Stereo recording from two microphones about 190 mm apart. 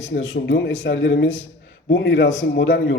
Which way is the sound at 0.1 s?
90° left.